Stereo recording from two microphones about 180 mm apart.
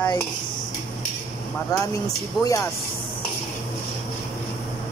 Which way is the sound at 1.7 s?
20° left (ahead or behind).